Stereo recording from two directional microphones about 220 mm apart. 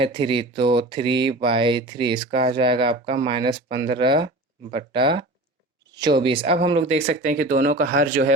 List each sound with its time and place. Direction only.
0.0 s speech: 25° right (ahead or behind)